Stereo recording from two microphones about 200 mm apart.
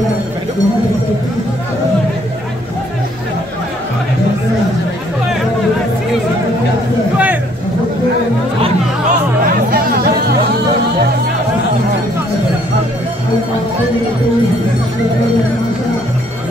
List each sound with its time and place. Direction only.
9.7 s music: 45° right (ahead or behind)